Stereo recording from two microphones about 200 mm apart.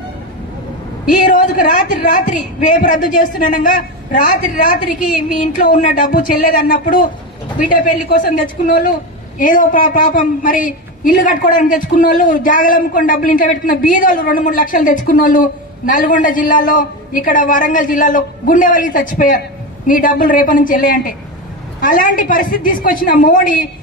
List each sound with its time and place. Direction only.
1.3 s a woman's voice: 40° left (ahead or behind)